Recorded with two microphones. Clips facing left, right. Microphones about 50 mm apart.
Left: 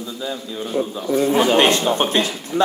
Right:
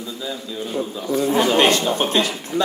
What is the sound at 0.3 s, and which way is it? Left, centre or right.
A man's voice, centre.